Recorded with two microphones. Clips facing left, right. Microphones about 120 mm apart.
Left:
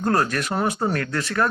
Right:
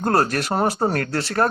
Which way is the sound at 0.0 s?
35° right (ahead or behind).